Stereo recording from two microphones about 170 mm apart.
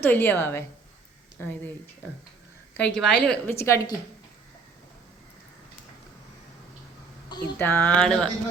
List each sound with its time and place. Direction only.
0.0 s a woman's voice: 10° left (ahead or behind)
2.7 s a woman's voice: 5° left (ahead or behind)
7.6 s a woman's voice: 10° left (ahead or behind)